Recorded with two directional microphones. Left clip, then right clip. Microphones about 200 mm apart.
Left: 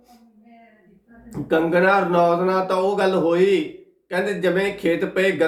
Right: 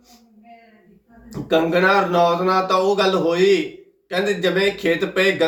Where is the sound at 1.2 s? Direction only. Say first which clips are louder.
Right 1 dB; 5° left (ahead or behind).